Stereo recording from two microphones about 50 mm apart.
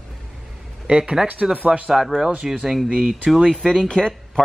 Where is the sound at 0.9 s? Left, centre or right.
Centre.